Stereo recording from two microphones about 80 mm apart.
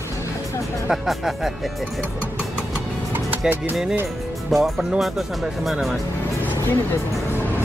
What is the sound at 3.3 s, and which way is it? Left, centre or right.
Speech, right.